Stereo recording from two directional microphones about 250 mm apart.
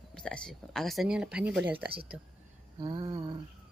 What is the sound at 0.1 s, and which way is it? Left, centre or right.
Speech, centre.